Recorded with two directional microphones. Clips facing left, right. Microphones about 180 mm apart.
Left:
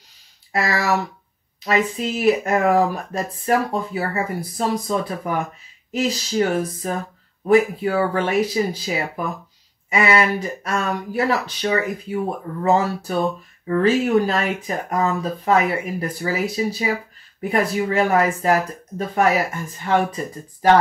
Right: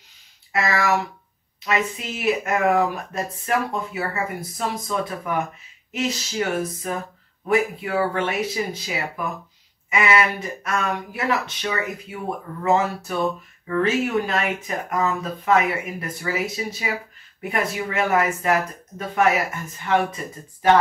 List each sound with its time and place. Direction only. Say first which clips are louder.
0.5 s speech: left 1 dB; 35° left (ahead or behind)